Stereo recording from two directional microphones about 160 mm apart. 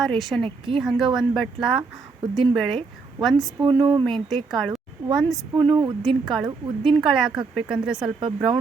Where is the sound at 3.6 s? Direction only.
30° right (ahead or behind).